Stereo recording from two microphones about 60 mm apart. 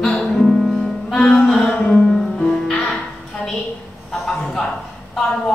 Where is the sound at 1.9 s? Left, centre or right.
Centre.